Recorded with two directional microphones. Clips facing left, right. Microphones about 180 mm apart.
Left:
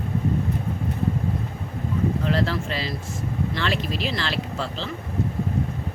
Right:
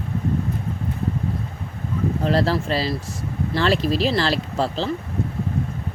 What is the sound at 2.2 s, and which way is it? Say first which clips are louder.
Speech: right 4 dB; 35° right (ahead or behind).